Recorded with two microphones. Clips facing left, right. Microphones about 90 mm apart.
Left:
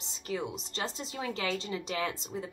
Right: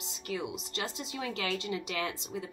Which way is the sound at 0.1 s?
40° left (ahead or behind).